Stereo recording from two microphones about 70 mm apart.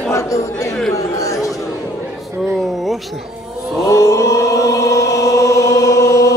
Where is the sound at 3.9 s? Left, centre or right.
Left.